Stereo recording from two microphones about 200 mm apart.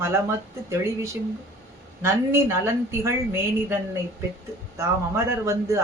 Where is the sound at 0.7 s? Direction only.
15° right (ahead or behind).